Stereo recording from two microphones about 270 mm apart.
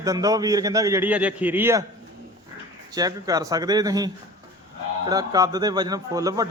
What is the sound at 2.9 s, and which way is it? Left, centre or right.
A man's voice, centre.